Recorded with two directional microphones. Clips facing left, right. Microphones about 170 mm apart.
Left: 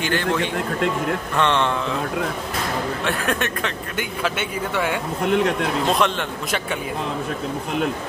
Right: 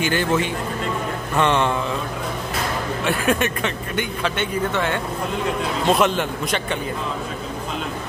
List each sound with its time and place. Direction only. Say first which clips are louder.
0.0 s speech: right 2 dB; 5° right (ahead or behind)
1.3 s mantra: right 3 dB; 5° right (ahead or behind)
3.0 s speech: right 3 dB; 5° right (ahead or behind)
5.2 s speech: left 8 dB; 75° left (ahead or behind)
5.9 s speech: right 5 dB; 5° right (ahead or behind)